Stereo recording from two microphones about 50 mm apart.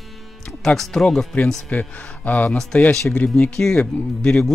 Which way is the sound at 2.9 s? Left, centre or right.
Centre.